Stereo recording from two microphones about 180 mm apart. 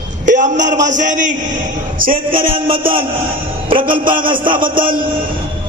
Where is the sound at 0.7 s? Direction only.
45° right (ahead or behind).